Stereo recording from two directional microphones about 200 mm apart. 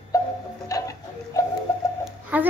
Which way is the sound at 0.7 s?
15° left (ahead or behind).